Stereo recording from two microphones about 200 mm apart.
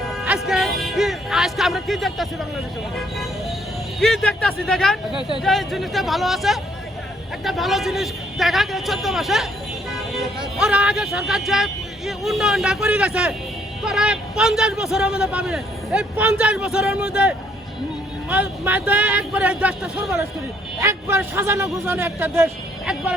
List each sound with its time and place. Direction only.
0.1 s music: centre (ahead or behind)
4.0 s a man's voice: centre (ahead or behind)